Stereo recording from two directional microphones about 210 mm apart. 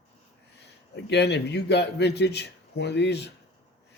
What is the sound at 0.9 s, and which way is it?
A man's voice, 55° left (ahead or behind).